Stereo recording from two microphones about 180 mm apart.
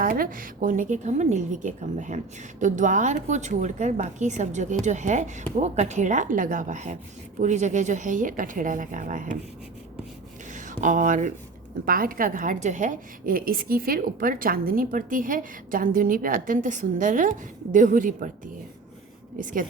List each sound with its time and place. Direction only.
0.0 s a woman's voice: 50° right (ahead or behind)
10.5 s a woman's voice: 45° right (ahead or behind)
19.4 s a woman's voice: 45° right (ahead or behind)